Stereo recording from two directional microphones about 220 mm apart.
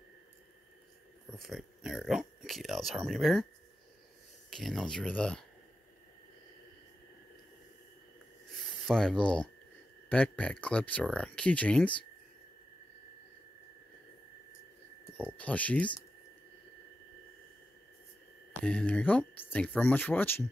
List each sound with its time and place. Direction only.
1.3 s speech: centre (ahead or behind)
4.5 s speech: centre (ahead or behind)
8.8 s speech: centre (ahead or behind)
15.3 s speech: 5° left (ahead or behind)
18.5 s speech: 5° left (ahead or behind)